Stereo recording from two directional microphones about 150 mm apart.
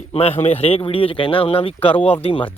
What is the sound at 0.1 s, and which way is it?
Speech, 40° left (ahead or behind).